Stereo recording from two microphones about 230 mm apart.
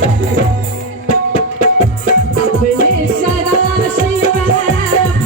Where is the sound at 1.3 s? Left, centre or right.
Left.